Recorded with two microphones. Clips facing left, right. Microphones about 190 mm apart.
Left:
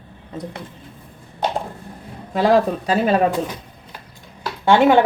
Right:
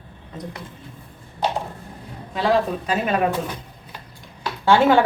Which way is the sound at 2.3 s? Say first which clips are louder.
Left 4 dB; 45° left (ahead or behind).